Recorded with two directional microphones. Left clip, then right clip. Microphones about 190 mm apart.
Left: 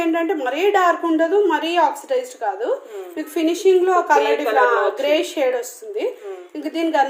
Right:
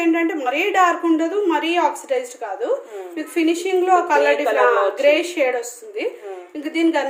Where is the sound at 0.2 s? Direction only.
45° left (ahead or behind).